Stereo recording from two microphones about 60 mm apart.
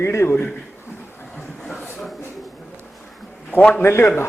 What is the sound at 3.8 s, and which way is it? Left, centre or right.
Speech, left.